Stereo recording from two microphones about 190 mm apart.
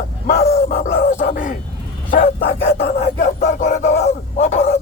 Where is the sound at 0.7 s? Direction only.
45° left (ahead or behind).